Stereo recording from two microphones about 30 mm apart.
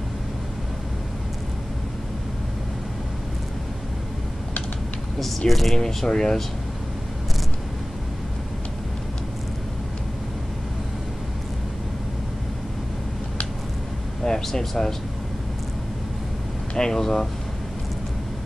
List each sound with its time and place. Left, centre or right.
5.5 s speech: centre
5.8 s speech: centre
14.2 s speech: centre
16.7 s speech: left